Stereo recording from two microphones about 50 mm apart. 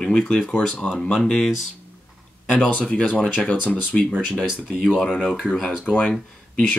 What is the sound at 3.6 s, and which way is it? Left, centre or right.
Speech, left.